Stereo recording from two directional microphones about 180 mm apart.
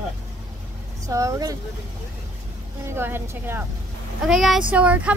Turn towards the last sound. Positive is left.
turn(degrees=-5)  # may be behind; listen again after turning